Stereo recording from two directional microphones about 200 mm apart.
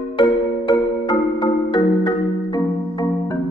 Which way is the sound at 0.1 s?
20° left (ahead or behind).